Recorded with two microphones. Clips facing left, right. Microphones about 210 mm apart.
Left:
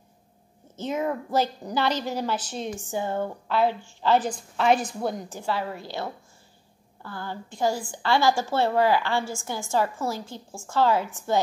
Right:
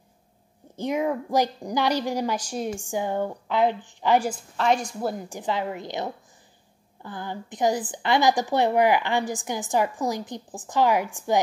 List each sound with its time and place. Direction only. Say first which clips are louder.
0.7 s a woman's voice: right 2 dB; 15° right (ahead or behind)
4.6 s a woman's voice: left 2 dB; 5° left (ahead or behind)
5.3 s a woman's voice: right 1 dB; 20° right (ahead or behind)